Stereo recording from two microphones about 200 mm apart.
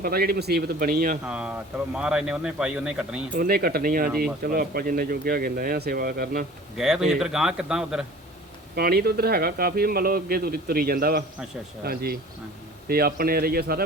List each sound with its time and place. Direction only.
0.0 s speech: 50° right (ahead or behind)
1.3 s speech: 5° right (ahead or behind)
3.3 s speech: 50° right (ahead or behind)
6.7 s speech: 5° right (ahead or behind)
8.7 s speech: 50° right (ahead or behind)